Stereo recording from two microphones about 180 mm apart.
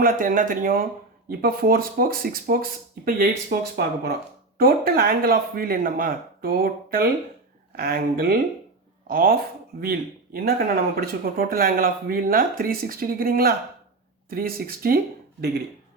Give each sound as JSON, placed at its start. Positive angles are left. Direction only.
{"t": 0.0, "sound": "speech", "side_deg": -50}